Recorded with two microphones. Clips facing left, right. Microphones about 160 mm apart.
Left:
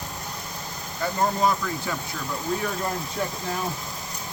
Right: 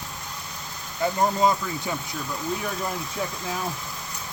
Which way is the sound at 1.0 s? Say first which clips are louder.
Right 2 dB; 20° right (ahead or behind).